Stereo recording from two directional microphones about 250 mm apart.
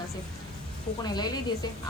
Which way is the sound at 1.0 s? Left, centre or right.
Centre.